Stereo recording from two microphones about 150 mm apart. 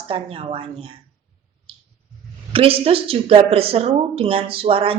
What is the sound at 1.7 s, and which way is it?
Squish, 40° right (ahead or behind).